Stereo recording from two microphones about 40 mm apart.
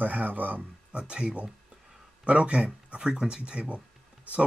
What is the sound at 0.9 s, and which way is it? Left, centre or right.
Speech, right.